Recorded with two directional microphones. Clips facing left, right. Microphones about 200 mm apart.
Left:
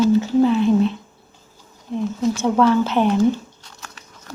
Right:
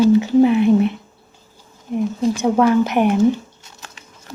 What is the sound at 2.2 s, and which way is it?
Speech, 15° right (ahead or behind).